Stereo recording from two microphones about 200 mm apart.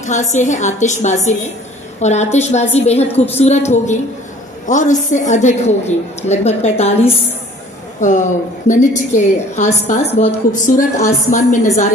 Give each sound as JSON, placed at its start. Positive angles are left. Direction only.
{"t": 0.0, "sound": "a woman's voice", "side_deg": 35}
{"t": 8.0, "sound": "a woman's voice", "side_deg": 40}